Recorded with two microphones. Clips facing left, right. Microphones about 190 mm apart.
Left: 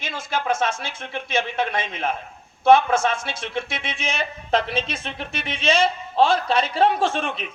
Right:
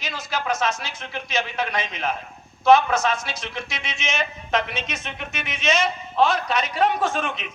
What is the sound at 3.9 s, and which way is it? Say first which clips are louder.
Speech: right 2 dB; 35° left (ahead or behind).